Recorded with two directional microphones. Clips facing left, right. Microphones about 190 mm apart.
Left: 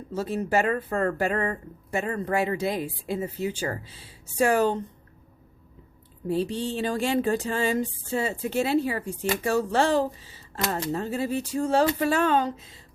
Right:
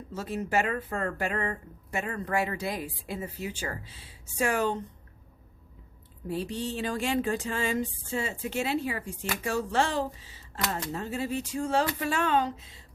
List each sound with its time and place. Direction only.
0.1 s speech: 30° left (ahead or behind)
6.2 s speech: 30° left (ahead or behind)